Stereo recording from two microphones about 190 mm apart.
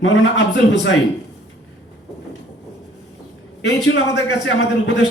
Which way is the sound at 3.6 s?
65° left (ahead or behind).